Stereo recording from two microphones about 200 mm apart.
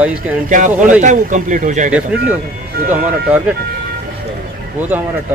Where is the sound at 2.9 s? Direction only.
5° right (ahead or behind).